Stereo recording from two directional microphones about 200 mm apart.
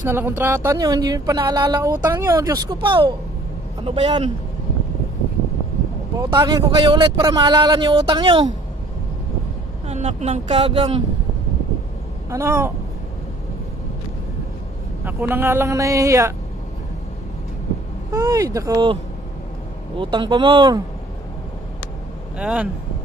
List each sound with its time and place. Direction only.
0.1 s a man's voice: 10° right (ahead or behind); by 4.3 s 30° right (ahead or behind)
6.1 s a man's voice: 20° right (ahead or behind)
9.8 s speech: 30° right (ahead or behind)
12.3 s speech: 15° right (ahead or behind)
15.0 s speech: 10° right (ahead or behind)
18.1 s speech: 15° right (ahead or behind)
20.0 s a man's voice: 25° right (ahead or behind)
22.4 s speech: 5° right (ahead or behind)